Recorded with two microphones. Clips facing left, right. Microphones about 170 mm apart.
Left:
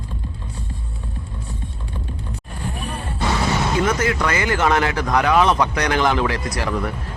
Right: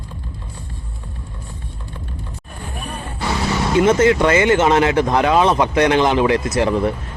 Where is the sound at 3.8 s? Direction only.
25° right (ahead or behind).